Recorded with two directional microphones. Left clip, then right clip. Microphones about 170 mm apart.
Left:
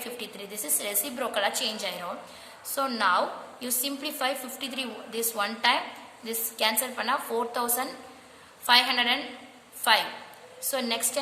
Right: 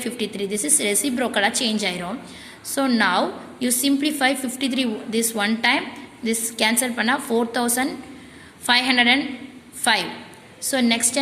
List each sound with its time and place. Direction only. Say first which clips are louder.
0.0 s a woman's voice: right 10 dB; 15° right (ahead or behind)